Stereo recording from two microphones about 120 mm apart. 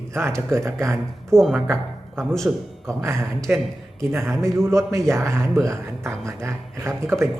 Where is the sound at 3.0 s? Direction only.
25° right (ahead or behind).